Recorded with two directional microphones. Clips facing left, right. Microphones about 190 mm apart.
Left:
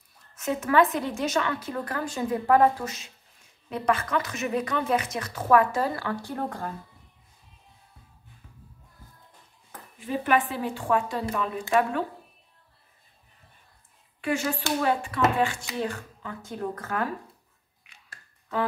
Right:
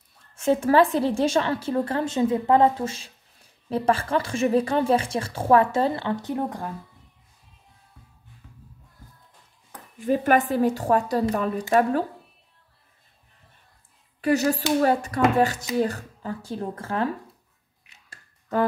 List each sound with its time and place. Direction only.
0.4 s a woman's voice: 30° right (ahead or behind)
9.9 s speech: 45° right (ahead or behind)
14.2 s speech: 40° right (ahead or behind)